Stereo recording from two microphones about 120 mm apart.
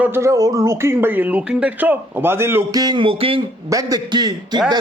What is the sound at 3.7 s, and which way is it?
Speech, 30° right (ahead or behind).